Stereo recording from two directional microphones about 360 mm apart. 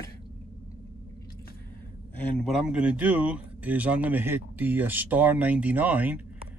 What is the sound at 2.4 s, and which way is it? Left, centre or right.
Speech, centre.